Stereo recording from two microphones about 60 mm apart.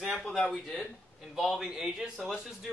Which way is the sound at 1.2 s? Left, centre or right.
Centre.